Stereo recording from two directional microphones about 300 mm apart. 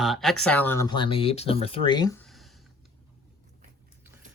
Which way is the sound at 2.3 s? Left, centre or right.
Centre.